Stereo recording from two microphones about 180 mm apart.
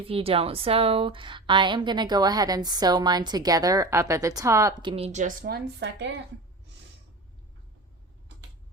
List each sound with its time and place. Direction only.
0.1 s a woman's voice: 30° right (ahead or behind); by 6.1 s 75° right (ahead or behind)